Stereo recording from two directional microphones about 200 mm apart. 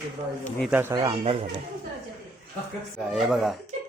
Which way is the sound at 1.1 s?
25° right (ahead or behind).